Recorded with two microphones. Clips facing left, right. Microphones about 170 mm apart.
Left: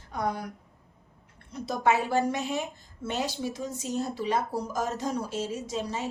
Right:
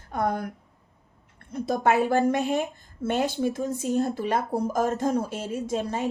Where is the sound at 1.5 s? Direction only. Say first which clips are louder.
Right 3 dB; 50° right (ahead or behind).